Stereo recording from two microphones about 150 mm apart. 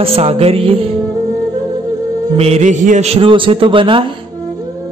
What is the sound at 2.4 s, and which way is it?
A man's voice, 45° right (ahead or behind).